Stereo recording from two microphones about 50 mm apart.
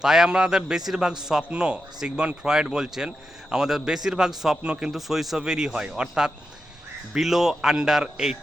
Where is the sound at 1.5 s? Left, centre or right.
Right; by 5.4 s centre.